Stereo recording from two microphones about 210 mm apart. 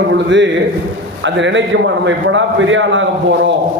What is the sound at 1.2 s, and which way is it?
A man's voice, 60° right (ahead or behind).